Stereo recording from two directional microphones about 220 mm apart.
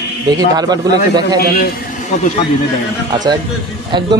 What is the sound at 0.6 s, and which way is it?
Speech, 15° right (ahead or behind).